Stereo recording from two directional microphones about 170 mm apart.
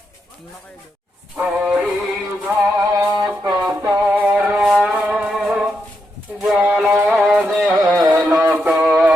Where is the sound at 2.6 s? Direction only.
20° right (ahead or behind).